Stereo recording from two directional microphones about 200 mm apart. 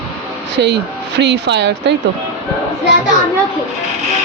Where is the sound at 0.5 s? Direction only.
60° right (ahead or behind).